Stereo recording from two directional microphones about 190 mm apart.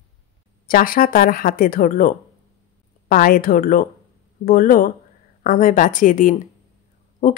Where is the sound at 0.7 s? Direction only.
50° left (ahead or behind).